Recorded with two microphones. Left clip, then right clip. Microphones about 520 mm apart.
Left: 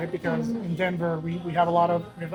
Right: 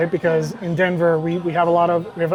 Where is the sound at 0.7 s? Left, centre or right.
Right.